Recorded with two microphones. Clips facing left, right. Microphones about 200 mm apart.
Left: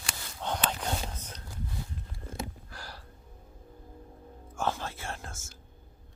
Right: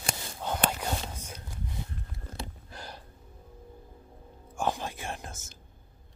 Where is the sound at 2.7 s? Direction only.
20° right (ahead or behind).